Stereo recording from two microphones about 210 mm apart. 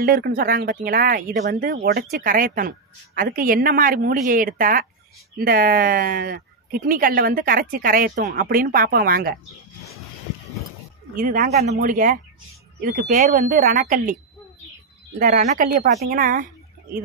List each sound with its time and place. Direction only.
0.0 s speech: 45° right (ahead or behind)
11.1 s speech: 40° right (ahead or behind)
15.1 s speech: 40° right (ahead or behind)